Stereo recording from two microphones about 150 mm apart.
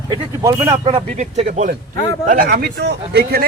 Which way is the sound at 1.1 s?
50° right (ahead or behind).